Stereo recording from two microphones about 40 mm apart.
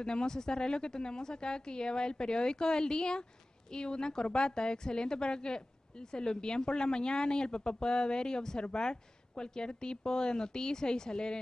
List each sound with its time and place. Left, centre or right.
0.0 s a woman's voice: centre